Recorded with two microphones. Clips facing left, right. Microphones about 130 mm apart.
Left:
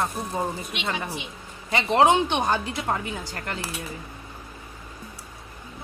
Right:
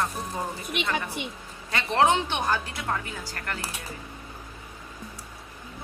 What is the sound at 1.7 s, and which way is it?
A woman's voice, 15° left (ahead or behind).